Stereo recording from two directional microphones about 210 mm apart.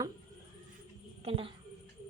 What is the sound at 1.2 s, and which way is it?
Speech, 25° right (ahead or behind).